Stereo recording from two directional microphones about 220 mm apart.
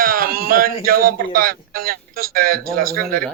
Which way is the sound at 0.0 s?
40° right (ahead or behind).